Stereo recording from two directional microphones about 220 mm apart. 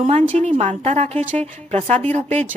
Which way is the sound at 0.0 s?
30° right (ahead or behind).